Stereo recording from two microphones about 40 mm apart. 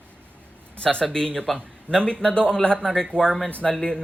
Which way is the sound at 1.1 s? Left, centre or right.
Centre.